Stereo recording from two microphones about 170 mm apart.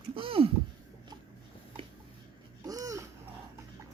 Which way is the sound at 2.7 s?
20° right (ahead or behind).